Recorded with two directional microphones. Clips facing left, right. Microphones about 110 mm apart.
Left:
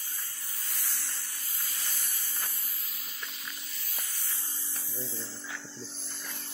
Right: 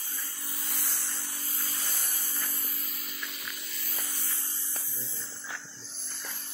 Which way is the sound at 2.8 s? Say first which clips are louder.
Right 4 dB; 55° right (ahead or behind).